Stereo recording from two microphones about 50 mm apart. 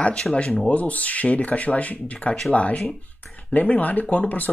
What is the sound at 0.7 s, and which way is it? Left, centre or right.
Speech, left.